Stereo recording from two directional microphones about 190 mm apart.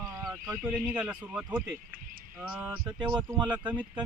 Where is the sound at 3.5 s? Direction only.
25° right (ahead or behind).